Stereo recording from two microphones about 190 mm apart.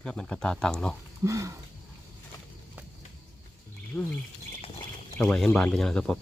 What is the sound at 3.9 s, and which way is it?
Speech, 5° left (ahead or behind).